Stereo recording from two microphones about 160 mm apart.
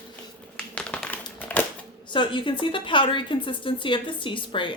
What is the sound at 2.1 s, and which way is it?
A woman's voice, 30° left (ahead or behind).